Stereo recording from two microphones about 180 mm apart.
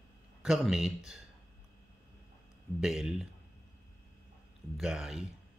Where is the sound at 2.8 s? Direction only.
Centre (ahead or behind).